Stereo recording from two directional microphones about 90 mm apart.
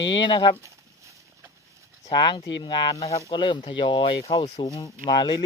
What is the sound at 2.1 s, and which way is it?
Speech, 55° left (ahead or behind).